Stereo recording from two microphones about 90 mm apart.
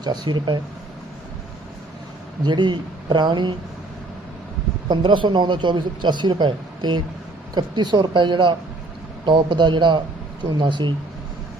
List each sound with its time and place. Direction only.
0.0 s speech: 55° right (ahead or behind)
2.4 s speech: 55° right (ahead or behind)
4.9 s speech: 60° right (ahead or behind)